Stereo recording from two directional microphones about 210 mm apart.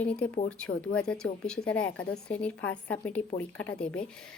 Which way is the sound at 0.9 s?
5° left (ahead or behind).